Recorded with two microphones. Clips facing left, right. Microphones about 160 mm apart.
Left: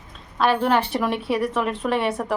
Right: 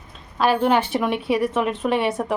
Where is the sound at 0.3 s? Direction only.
Centre (ahead or behind).